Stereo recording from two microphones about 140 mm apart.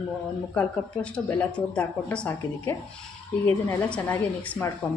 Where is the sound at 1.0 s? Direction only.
5° left (ahead or behind).